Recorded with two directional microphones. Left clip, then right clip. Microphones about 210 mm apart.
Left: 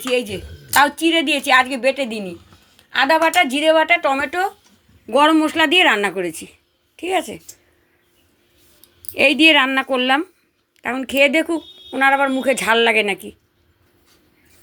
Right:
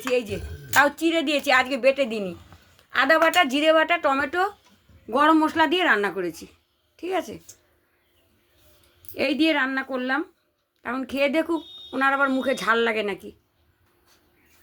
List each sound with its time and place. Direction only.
0.1 s a woman's voice: 5° left (ahead or behind)
9.1 s a woman's voice: 20° left (ahead or behind)